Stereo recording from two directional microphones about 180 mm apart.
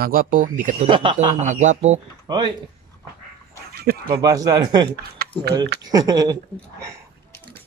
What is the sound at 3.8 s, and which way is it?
Speech, 55° right (ahead or behind).